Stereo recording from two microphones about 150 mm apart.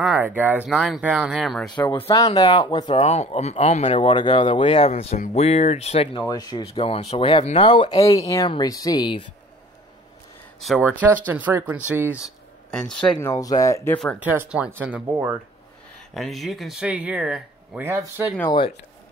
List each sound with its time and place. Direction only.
0.2 s speech: 10° right (ahead or behind)
1.8 s speech: 30° left (ahead or behind)
3.0 s speech: 45° left (ahead or behind)
4.0 s speech: 30° left (ahead or behind)
4.9 s speech: 55° left (ahead or behind)
6.2 s speech: 25° left (ahead or behind)
6.6 s speech: 40° left (ahead or behind)
8.0 s speech: 20° left (ahead or behind)
10.8 s speech: 10° right (ahead or behind)
12.7 s speech: 5° left (ahead or behind)
13.3 s speech: 25° left (ahead or behind)
14.2 s speech: 10° right (ahead or behind)
16.1 s speech: centre (ahead or behind)